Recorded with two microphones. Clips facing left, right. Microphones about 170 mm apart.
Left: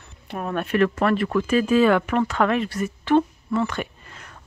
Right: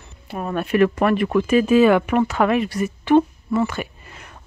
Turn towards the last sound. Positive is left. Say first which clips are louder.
# right 1 dB
turn(degrees=-10)  # may be behind; listen again after turning